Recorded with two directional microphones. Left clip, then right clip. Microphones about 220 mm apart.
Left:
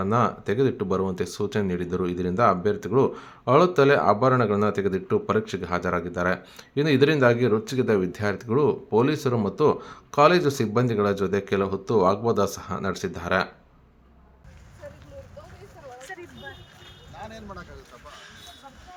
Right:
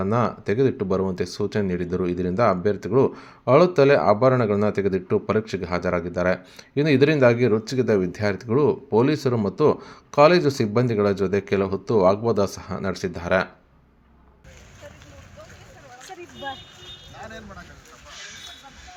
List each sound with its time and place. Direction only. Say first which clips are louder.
0.0 s speech: even; 5° right (ahead or behind)